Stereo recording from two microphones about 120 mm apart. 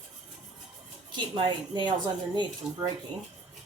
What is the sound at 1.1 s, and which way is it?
Speech, 45° right (ahead or behind).